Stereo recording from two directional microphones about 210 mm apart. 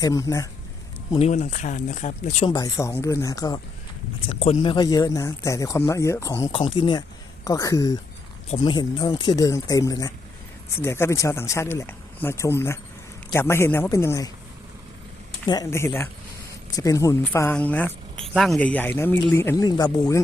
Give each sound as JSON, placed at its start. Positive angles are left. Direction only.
{"t": 0.0, "sound": "speech", "side_deg": 15}
{"t": 1.1, "sound": "speech", "side_deg": 30}
{"t": 2.5, "sound": "speech", "side_deg": 15}
{"t": 4.3, "sound": "speech", "side_deg": 30}
{"t": 15.4, "sound": "speech", "side_deg": 15}